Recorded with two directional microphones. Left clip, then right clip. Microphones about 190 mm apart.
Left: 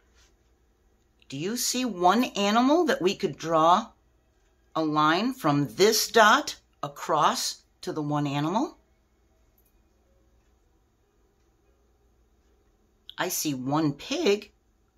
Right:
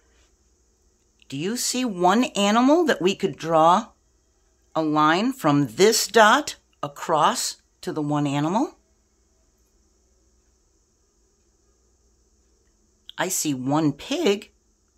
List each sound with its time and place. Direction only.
1.2 s speech: 35° right (ahead or behind)
13.0 s speech: 40° right (ahead or behind)